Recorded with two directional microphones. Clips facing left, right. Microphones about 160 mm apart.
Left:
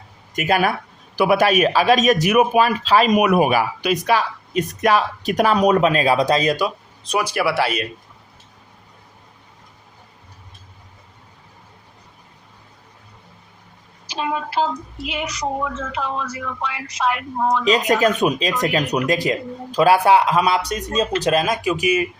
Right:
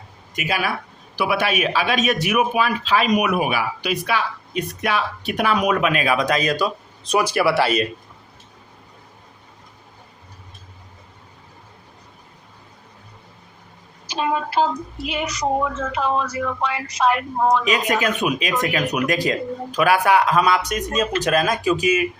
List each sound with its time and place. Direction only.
0.3 s a man's voice: 45° left (ahead or behind); by 6.7 s 25° left (ahead or behind)
7.1 s speech: centre (ahead or behind)
14.1 s a woman's voice: 45° right (ahead or behind)
17.7 s a man's voice: 40° left (ahead or behind); by 22.0 s 25° left (ahead or behind)